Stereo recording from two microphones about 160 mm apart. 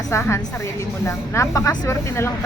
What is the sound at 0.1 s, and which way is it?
A woman's voice, 15° left (ahead or behind).